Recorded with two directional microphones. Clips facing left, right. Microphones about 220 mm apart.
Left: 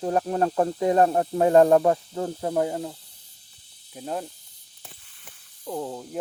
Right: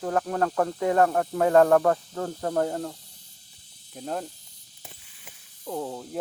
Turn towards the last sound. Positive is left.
turn(degrees=5)  # may be behind; listen again after turning